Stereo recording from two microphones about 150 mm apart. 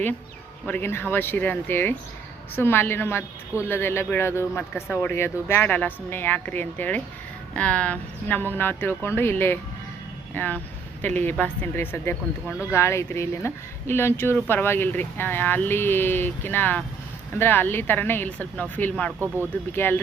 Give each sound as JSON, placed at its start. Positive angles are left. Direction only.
{"t": 0.7, "sound": "a woman's voice", "side_deg": 15}